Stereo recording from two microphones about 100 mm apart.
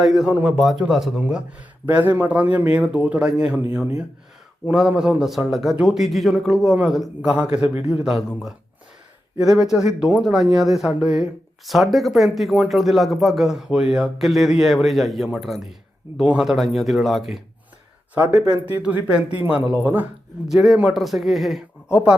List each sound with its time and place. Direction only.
0.0 s speech: centre (ahead or behind)
0.3 s speech: 15° right (ahead or behind)
0.5 s speech: 5° right (ahead or behind)
4.6 s speech: 5° right (ahead or behind)
9.4 s speech: 5° right (ahead or behind)
18.1 s speech: 10° right (ahead or behind)
20.5 s speech: centre (ahead or behind)
21.8 s speech: 10° right (ahead or behind)